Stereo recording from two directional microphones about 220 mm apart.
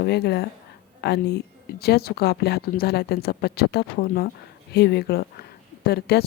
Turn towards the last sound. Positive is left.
turn(degrees=45)  # may be behind; listen again after turning